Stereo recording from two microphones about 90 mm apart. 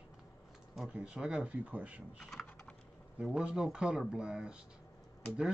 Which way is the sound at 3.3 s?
10° right (ahead or behind).